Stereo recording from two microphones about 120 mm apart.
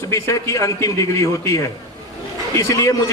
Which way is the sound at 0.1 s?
25° left (ahead or behind).